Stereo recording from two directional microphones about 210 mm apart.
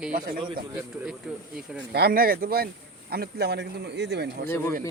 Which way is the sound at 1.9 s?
45° right (ahead or behind).